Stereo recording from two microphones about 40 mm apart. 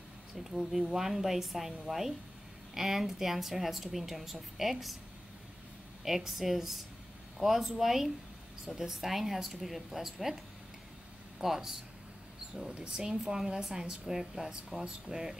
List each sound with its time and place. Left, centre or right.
0.4 s a woman's voice: centre
6.0 s a woman's voice: centre
12.5 s speech: right